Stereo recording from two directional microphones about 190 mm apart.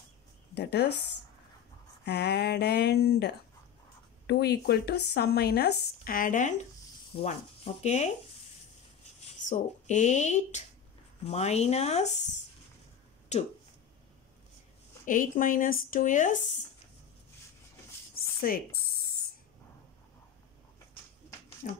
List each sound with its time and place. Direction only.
0.6 s speech: 60° left (ahead or behind)
2.0 s speech: 60° left (ahead or behind); by 8.1 s 35° left (ahead or behind)
9.5 s speech: 40° left (ahead or behind)
13.3 s speech: 35° left (ahead or behind)
15.0 s speech: 45° left (ahead or behind)
18.4 s speech: 50° left (ahead or behind)
21.6 s speech: 40° left (ahead or behind)